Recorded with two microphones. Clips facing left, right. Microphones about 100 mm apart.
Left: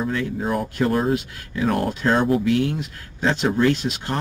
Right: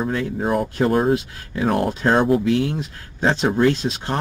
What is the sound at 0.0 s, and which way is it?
Speech, 30° right (ahead or behind).